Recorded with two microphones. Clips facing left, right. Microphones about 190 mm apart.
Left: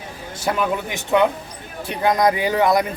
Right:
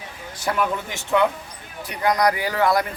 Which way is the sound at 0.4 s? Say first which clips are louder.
Left 2 dB; 20° left (ahead or behind).